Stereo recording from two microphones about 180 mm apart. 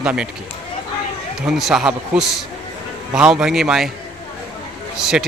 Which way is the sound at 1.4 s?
Centre (ahead or behind).